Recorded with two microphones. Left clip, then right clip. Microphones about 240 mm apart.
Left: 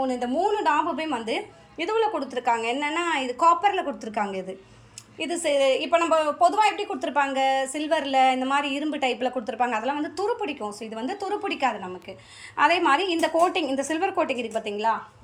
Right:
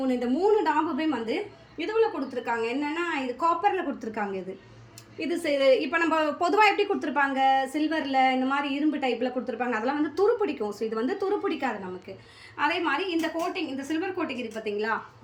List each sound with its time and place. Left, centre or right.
0.0 s a woman's voice: centre
12.5 s a woman's voice: centre